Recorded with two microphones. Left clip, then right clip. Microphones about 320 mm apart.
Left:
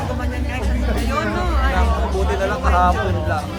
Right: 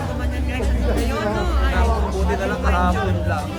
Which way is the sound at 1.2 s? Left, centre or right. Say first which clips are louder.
Left 2 dB; centre.